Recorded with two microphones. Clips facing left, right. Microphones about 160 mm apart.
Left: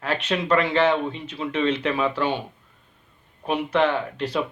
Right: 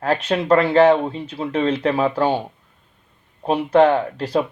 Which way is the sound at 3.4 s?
35° right (ahead or behind).